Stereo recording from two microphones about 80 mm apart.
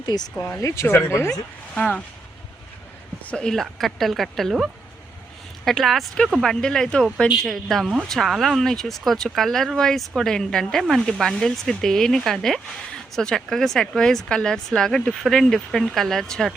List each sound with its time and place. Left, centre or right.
0.0 s speech: left
0.3 s speech: left
1.7 s speech: centre
3.2 s speech: centre
5.6 s speech: centre